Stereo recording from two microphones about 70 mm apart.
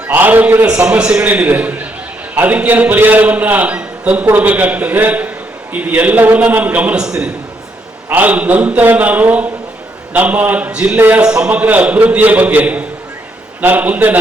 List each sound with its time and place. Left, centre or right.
0.1 s a man's voice: right
8.1 s a man's voice: right
10.9 s a man's voice: right
11.2 s a man's voice: centre